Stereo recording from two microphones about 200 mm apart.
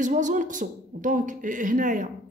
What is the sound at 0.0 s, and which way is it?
Speech, 40° right (ahead or behind).